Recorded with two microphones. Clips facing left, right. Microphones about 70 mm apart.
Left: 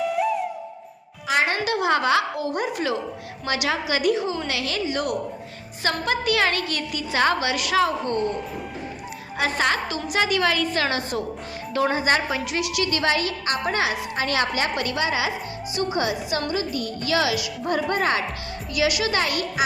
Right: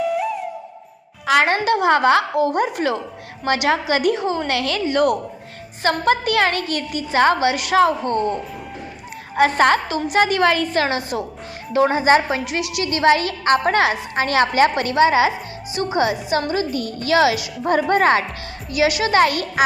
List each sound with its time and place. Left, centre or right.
0.0 s music: centre
1.5 s a woman's voice: right
9.3 s a woman's voice: right
13.9 s a woman's voice: right
17.7 s a woman's voice: right
18.7 s a child's voice: right